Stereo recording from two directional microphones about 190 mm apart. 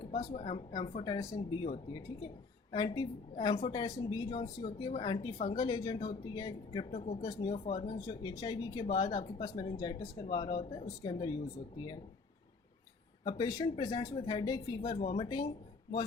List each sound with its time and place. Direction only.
0.0 s speech: 25° left (ahead or behind)
7.2 s speech: 20° left (ahead or behind)
7.6 s speech: 35° left (ahead or behind)
7.9 s speech: 20° left (ahead or behind)
13.2 s speech: 20° left (ahead or behind)